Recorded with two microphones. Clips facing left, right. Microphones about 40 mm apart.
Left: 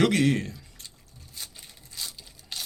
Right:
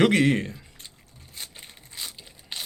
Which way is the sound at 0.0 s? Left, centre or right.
Right.